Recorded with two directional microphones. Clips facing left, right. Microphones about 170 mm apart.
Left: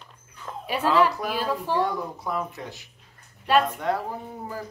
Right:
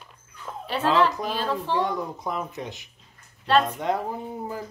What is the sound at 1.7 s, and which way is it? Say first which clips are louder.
Speech: even; 20° right (ahead or behind).